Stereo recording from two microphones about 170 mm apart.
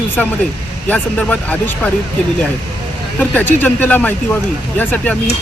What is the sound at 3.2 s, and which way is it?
Speech, 10° left (ahead or behind).